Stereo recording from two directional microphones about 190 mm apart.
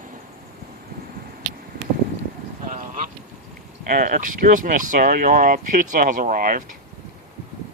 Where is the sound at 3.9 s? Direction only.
45° right (ahead or behind).